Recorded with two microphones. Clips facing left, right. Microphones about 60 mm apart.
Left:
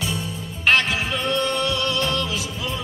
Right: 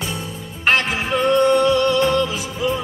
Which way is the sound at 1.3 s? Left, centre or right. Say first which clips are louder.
Right 10 dB; right.